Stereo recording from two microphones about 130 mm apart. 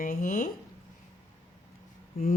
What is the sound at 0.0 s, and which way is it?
Speech, 90° left.